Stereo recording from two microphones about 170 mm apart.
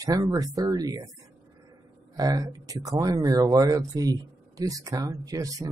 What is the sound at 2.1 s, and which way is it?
Speech, 20° right (ahead or behind).